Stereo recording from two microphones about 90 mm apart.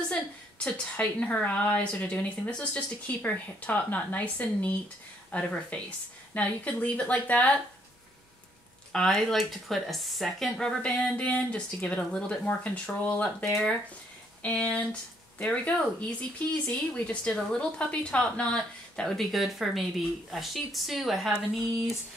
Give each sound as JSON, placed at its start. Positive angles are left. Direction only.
{"t": 0.7, "sound": "speech", "side_deg": 15}
{"t": 8.9, "sound": "speech", "side_deg": 5}